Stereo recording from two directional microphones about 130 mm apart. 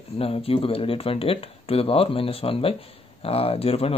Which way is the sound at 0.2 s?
45° left (ahead or behind).